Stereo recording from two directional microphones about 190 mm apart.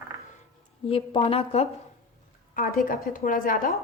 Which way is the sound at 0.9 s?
30° left (ahead or behind).